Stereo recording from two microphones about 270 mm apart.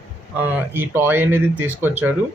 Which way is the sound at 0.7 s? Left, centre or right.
Centre.